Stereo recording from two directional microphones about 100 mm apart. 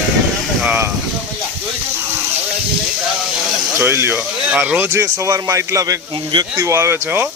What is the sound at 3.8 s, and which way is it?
Speech, 25° right (ahead or behind).